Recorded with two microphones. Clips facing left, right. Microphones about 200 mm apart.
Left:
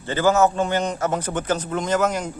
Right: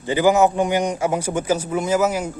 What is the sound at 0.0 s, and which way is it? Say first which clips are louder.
A man's voice: right 2 dB; 15° right (ahead or behind).